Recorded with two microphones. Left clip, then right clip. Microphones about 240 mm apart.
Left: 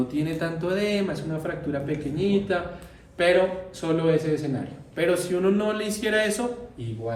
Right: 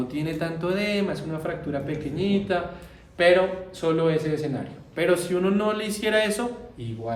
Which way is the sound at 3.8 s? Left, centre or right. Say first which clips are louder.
Even; right.